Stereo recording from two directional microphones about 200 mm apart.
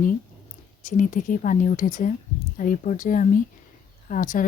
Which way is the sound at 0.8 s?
40° left (ahead or behind).